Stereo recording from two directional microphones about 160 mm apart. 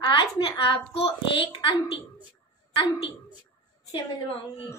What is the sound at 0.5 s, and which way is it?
A woman's voice, 35° left (ahead or behind).